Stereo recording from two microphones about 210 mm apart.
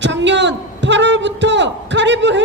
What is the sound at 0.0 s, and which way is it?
A man's voice, 60° right (ahead or behind).